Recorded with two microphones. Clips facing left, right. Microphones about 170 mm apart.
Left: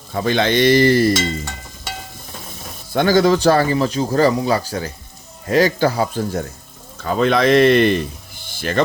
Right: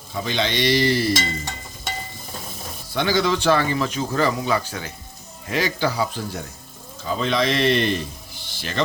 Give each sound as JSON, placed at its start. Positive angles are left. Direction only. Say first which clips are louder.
{"t": 0.1, "sound": "speech", "louder": "left 7 dB", "side_deg": 50}
{"t": 2.9, "sound": "a man's voice", "louder": "left 7 dB", "side_deg": 45}
{"t": 7.0, "sound": "speech", "louder": "left 6 dB", "side_deg": 60}
{"t": 8.4, "sound": "music", "louder": "left 9 dB", "side_deg": 50}